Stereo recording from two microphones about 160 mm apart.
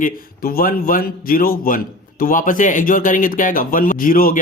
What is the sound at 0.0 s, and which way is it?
Speech, 65° left (ahead or behind).